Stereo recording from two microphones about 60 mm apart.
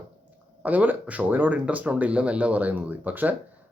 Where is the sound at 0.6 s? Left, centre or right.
Right.